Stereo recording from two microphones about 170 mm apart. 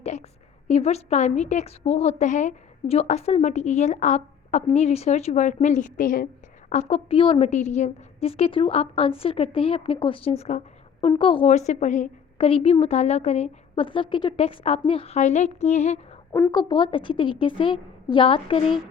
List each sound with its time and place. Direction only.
0.0 s a sound: 40° left (ahead or behind)
0.7 s a woman's voice: 40° left (ahead or behind); by 6.2 s 55° left (ahead or behind)
6.7 s a woman's voice: 40° left (ahead or behind)
11.5 s a woman's voice: 45° left (ahead or behind)
16.3 s a woman's voice: 20° left (ahead or behind)